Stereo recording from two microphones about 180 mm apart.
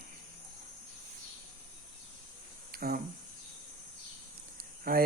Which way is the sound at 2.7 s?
55° right (ahead or behind).